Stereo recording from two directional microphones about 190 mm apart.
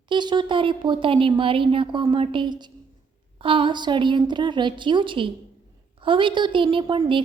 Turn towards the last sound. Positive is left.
turn(degrees=-25)  # may be behind; listen again after turning